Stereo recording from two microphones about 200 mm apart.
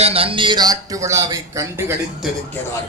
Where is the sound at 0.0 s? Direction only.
30° right (ahead or behind).